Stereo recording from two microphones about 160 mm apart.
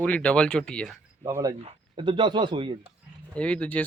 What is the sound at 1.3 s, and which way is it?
Speech, 20° right (ahead or behind).